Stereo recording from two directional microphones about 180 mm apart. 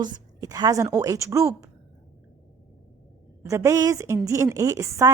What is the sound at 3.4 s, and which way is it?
A woman's voice, 15° right (ahead or behind).